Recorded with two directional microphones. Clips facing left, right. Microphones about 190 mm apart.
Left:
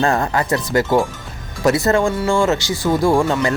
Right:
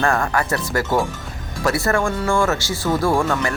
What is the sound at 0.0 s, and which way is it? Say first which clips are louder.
Speech: left 2 dB; 20° left (ahead or behind).